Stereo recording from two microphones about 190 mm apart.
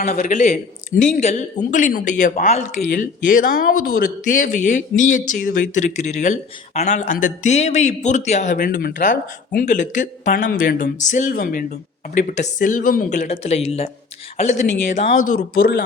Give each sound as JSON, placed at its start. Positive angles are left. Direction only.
{"t": 0.1, "sound": "speech", "side_deg": 40}
{"t": 15.3, "sound": "speech", "side_deg": 50}